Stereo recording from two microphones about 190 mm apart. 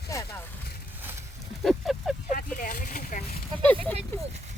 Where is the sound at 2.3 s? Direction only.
45° left (ahead or behind).